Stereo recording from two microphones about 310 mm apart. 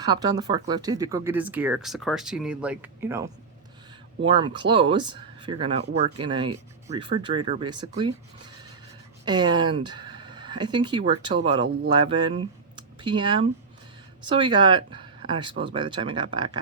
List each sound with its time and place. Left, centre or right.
0.0 s speech: centre
4.3 s speech: centre